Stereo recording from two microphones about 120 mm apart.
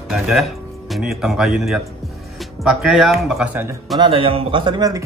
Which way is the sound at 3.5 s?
15° right (ahead or behind).